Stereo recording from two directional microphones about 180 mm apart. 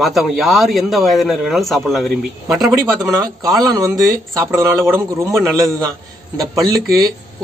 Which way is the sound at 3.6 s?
20° right (ahead or behind).